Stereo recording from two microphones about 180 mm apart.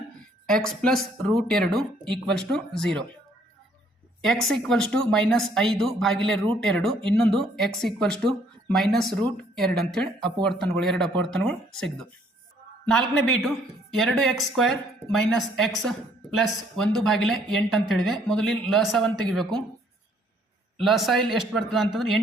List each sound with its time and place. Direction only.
0.4 s speech: 5° left (ahead or behind)
4.2 s speech: centre (ahead or behind)
20.7 s speech: centre (ahead or behind)